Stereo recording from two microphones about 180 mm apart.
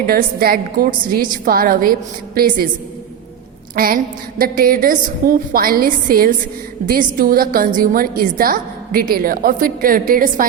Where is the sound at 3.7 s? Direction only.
55° right (ahead or behind).